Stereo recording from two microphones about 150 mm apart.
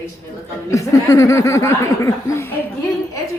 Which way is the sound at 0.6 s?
20° left (ahead or behind).